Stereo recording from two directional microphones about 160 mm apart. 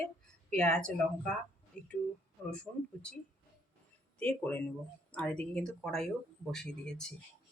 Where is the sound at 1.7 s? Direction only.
5° left (ahead or behind).